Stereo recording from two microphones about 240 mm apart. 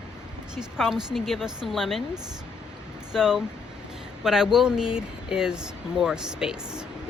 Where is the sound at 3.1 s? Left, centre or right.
Centre.